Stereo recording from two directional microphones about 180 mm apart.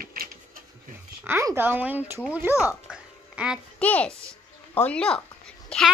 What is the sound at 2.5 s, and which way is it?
Speech, 15° left (ahead or behind).